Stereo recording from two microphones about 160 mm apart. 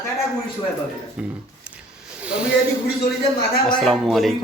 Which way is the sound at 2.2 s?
5° right (ahead or behind).